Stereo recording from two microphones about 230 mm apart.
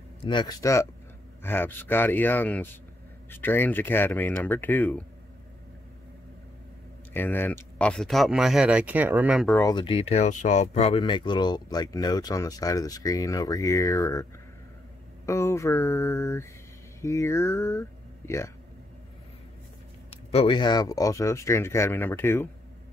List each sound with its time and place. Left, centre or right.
0.2 s speech: centre
7.2 s speech: centre
9.5 s speech: centre
15.2 s speech: centre
20.2 s speech: left